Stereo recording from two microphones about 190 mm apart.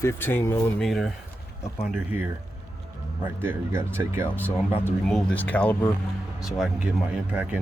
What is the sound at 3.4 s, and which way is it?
Speech, 10° right (ahead or behind).